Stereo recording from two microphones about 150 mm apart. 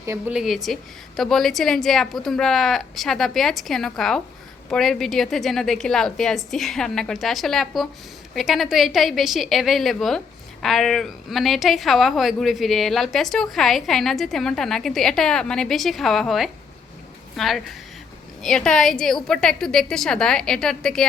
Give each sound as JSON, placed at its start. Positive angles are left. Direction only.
{"t": 0.0, "sound": "a woman's voice", "side_deg": -20}
{"t": 0.3, "sound": "a woman's voice", "side_deg": 0}